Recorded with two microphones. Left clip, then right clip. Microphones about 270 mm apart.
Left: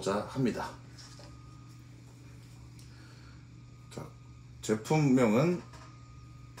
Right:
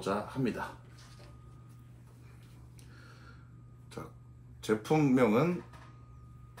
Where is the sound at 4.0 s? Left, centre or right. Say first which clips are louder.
Right 1 dB; centre.